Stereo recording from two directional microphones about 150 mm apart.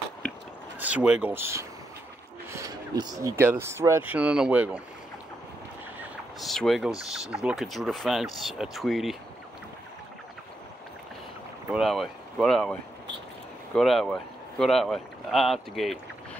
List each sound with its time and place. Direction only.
0.7 s speech: 10° right (ahead or behind)
6.4 s speech: centre (ahead or behind)
11.7 s speech: centre (ahead or behind)
13.7 s speech: centre (ahead or behind)